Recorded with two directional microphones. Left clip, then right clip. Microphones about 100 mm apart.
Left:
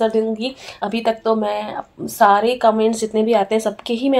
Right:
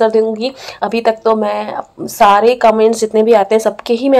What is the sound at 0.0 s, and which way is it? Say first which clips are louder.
Speech: right 6 dB; 30° right (ahead or behind).